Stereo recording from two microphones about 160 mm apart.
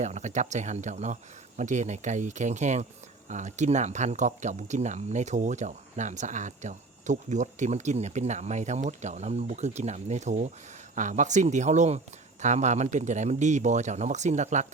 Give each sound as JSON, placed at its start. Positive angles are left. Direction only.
{"t": 0.0, "sound": "speech", "side_deg": -45}